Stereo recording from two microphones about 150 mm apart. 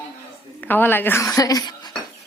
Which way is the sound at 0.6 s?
10° left (ahead or behind).